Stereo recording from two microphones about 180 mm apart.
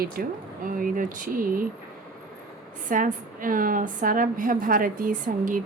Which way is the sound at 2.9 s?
45° right (ahead or behind).